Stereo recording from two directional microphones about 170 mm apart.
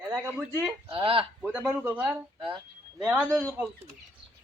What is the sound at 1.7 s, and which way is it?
Speech, 10° right (ahead or behind).